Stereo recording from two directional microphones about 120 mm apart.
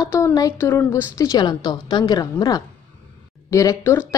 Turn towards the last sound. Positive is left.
turn(degrees=20)  # may be behind; listen again after turning